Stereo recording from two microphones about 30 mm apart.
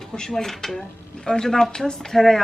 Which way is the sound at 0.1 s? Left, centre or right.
Centre.